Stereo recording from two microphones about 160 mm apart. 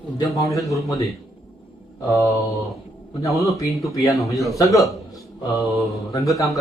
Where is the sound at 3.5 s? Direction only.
20° left (ahead or behind).